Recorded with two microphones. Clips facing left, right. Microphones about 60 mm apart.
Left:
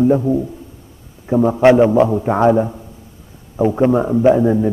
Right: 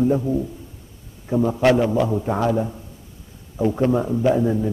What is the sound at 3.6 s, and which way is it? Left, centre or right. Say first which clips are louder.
A man's voice: left 5 dB; left.